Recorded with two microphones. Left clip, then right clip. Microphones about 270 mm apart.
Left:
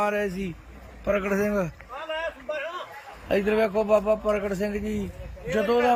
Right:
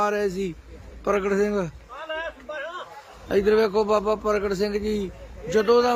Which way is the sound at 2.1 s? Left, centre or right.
Left.